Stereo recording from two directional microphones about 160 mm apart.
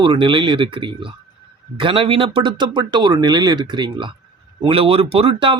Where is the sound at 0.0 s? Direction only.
30° right (ahead or behind).